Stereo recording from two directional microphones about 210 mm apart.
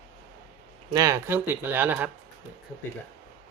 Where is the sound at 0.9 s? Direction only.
15° right (ahead or behind).